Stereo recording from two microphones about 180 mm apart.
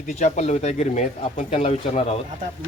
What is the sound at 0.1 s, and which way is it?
Speech, 40° left (ahead or behind).